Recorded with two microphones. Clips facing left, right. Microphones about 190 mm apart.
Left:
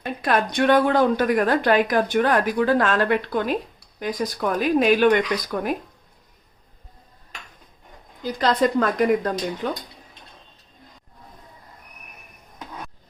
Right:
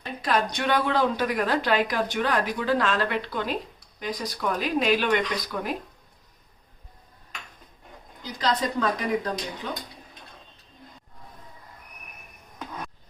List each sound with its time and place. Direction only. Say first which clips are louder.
0.0 s speech: left 3 dB; 55° left (ahead or behind)
8.2 s speech: left 7 dB; 55° left (ahead or behind)